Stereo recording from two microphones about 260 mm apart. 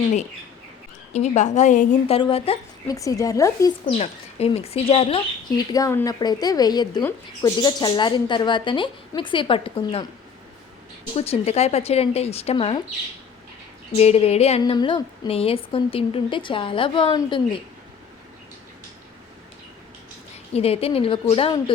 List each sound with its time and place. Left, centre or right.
1.1 s a woman's voice: left
3.9 s speech: left
11.1 s a woman's voice: left
13.9 s a woman's voice: left
20.5 s a woman's voice: left